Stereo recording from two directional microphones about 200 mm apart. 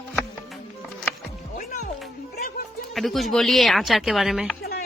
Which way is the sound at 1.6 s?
35° left (ahead or behind).